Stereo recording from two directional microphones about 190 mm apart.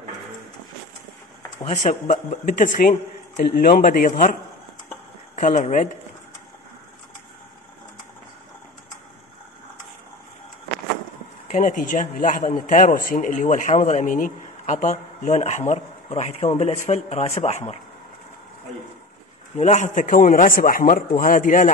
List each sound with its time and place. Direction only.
1.6 s speech: 30° left (ahead or behind)
2.0 s a man's voice: 45° left (ahead or behind)
11.5 s a man's voice: 40° left (ahead or behind)
19.5 s a man's voice: 40° left (ahead or behind)